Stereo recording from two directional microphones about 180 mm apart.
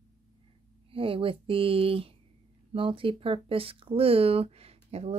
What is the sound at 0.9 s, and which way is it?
Speech, 30° right (ahead or behind).